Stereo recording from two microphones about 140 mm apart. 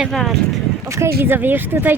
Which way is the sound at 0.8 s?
20° right (ahead or behind).